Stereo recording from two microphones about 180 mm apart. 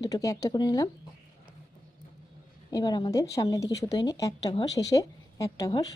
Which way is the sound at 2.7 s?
20° left (ahead or behind).